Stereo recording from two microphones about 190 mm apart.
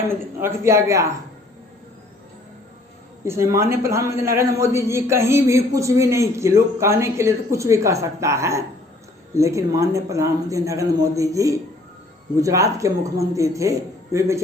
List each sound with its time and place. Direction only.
0.1 s a man's voice: 10° right (ahead or behind)
3.2 s a man's voice: 15° right (ahead or behind)